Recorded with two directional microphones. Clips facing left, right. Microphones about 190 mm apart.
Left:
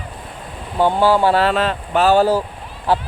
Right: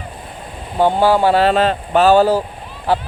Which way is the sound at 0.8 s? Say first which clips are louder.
Right 1 dB; 15° right (ahead or behind).